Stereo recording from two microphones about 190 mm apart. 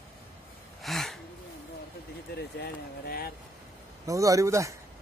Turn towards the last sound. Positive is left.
turn(degrees=-15)  # may be behind; listen again after turning